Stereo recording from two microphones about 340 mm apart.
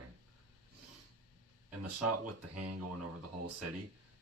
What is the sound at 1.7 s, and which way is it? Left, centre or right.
Speech, right.